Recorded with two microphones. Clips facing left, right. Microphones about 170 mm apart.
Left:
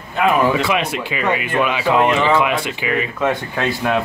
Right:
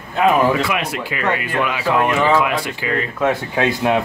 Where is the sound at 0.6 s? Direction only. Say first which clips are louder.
Left 2 dB; 25° left (ahead or behind).